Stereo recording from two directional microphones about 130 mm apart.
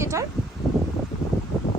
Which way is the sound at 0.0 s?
25° right (ahead or behind).